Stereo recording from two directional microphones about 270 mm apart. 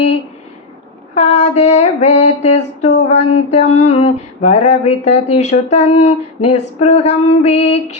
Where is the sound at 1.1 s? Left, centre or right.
Left.